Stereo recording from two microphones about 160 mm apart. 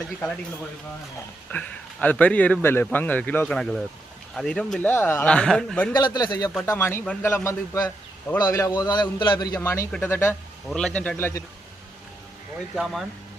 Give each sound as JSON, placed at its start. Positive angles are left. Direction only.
{"t": 1.5, "sound": "a man's voice", "side_deg": 10}
{"t": 5.9, "sound": "a man's voice", "side_deg": 25}
{"t": 9.6, "sound": "speech", "side_deg": 15}
{"t": 10.7, "sound": "a man's voice", "side_deg": 5}
{"t": 12.7, "sound": "a man's voice", "side_deg": 0}